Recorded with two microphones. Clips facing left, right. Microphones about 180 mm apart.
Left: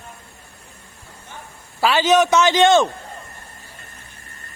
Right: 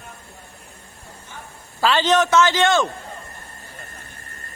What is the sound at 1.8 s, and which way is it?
A man's voice, 10° left (ahead or behind).